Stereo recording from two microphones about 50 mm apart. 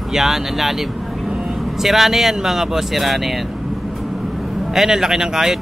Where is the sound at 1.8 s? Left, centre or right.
Centre.